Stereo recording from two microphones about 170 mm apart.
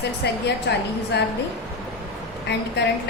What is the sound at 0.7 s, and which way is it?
Speech, 90° left.